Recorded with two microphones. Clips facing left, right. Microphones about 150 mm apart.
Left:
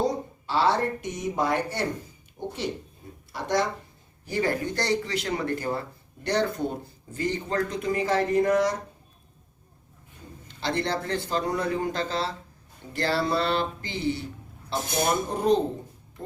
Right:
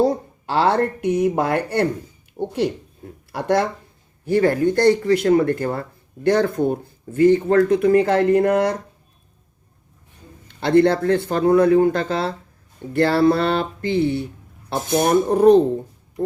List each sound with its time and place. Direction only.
0.5 s speech: 60° right (ahead or behind)
10.5 s speech: 55° right (ahead or behind)